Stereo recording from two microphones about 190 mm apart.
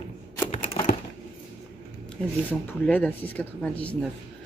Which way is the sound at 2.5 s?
10° left (ahead or behind).